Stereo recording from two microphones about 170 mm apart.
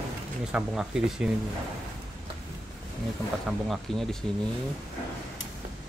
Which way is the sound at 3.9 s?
Centre (ahead or behind).